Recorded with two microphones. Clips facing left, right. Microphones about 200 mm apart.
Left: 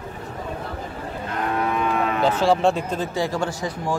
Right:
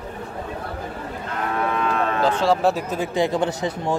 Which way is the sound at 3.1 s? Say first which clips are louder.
Right 6 dB; 20° right (ahead or behind).